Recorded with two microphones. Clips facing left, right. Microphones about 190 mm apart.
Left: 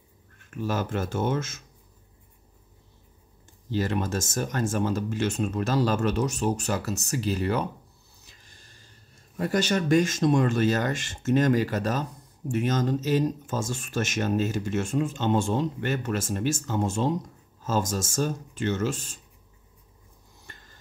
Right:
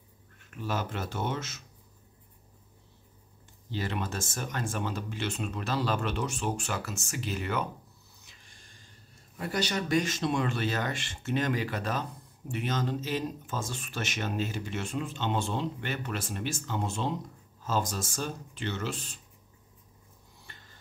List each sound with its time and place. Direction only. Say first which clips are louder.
0.5 s speech: left 5 dB; 45° left (ahead or behind)
3.7 s speech: left 7 dB; 45° left (ahead or behind)
8.3 s a sound: left 4 dB; 40° left (ahead or behind)
9.4 s speech: left 6 dB; 45° left (ahead or behind)